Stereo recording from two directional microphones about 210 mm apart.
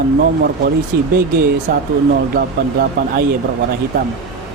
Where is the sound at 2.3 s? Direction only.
45° right (ahead or behind).